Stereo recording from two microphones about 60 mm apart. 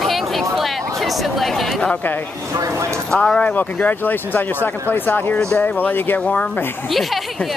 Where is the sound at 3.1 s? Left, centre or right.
Centre.